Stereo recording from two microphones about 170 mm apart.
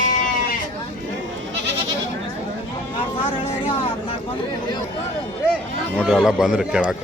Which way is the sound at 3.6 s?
30° left (ahead or behind).